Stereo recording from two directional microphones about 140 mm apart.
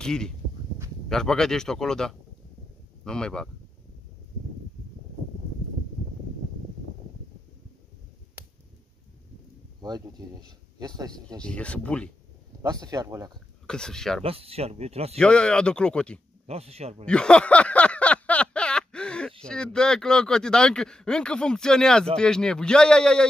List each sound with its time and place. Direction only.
0.0 s speech: 5° left (ahead or behind)
9.8 s speech: 30° right (ahead or behind)
11.3 s speech: 10° left (ahead or behind)
12.6 s speech: 25° right (ahead or behind)
13.7 s speech: 5° left (ahead or behind)
14.2 s speech: 45° right (ahead or behind)
15.1 s speech: 5° left (ahead or behind)
16.4 s speech: 45° right (ahead or behind)
17.0 s a sound: 5° left (ahead or behind)
19.4 s speech: 5° left (ahead or behind)